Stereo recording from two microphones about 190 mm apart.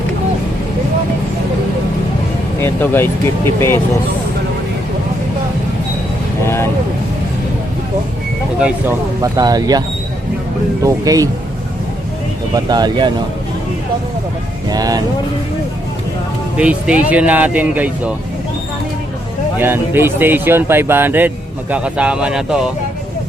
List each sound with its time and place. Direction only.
2.6 s speech: 10° left (ahead or behind)
6.4 s vehicle: 15° left (ahead or behind)
8.6 s speech: 15° right (ahead or behind)
10.8 s speech: 20° right (ahead or behind)
12.5 s speech: 20° right (ahead or behind)
14.7 s speech: 20° right (ahead or behind)
16.6 s speech: 5° right (ahead or behind)
19.5 s speech: 10° right (ahead or behind)